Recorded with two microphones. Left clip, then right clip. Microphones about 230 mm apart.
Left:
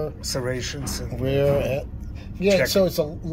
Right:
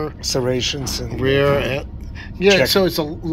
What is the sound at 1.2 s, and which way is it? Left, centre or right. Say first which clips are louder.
Speech: right 5 dB; centre.